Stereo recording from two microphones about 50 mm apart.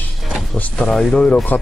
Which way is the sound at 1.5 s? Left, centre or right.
Left.